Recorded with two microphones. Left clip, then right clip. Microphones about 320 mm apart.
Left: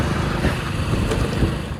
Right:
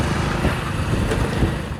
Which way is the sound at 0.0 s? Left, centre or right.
Centre.